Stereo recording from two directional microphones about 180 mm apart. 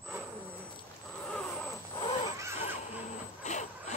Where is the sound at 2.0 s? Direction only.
25° left (ahead or behind).